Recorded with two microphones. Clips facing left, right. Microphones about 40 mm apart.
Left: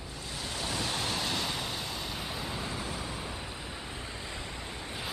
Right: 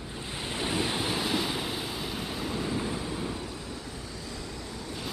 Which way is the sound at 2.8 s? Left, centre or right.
Centre.